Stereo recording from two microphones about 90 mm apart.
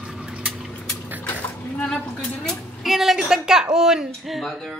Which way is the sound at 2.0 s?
20° left (ahead or behind).